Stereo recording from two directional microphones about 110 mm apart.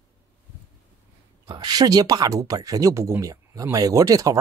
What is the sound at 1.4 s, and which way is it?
Speech, 40° right (ahead or behind).